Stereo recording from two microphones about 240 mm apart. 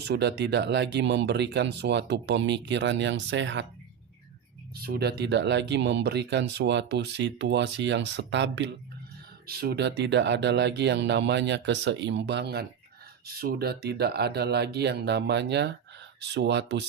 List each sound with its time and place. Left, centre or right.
0.0 s speech: right
4.8 s speech: right